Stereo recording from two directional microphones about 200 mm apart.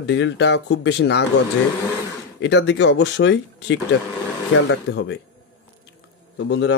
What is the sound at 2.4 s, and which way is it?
Speech, 60° left (ahead or behind).